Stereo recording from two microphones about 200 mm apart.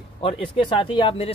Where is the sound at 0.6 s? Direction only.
25° left (ahead or behind).